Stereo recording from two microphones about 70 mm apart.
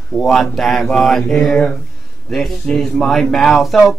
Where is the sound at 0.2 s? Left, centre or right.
Centre.